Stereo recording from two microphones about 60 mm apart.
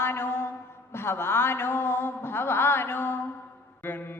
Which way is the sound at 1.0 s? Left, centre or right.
Left.